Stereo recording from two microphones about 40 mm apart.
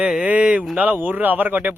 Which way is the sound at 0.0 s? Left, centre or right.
Right.